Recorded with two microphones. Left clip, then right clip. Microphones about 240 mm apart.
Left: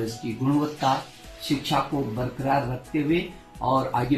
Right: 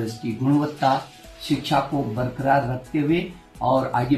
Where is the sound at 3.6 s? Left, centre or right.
Centre.